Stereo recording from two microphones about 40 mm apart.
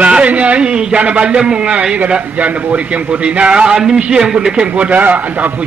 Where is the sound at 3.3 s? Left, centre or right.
Right.